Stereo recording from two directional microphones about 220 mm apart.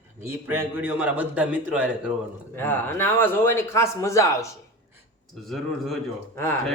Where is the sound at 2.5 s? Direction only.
10° left (ahead or behind).